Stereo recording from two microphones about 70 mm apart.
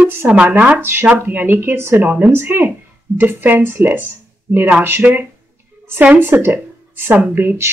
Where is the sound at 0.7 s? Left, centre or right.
Right.